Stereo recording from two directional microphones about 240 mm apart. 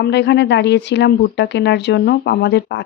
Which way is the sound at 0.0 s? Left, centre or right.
Left.